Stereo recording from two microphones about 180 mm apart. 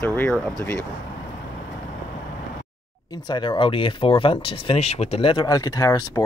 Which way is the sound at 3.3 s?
25° left (ahead or behind).